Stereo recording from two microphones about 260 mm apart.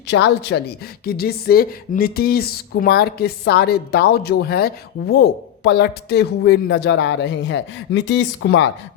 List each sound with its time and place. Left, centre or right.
0.1 s speech: left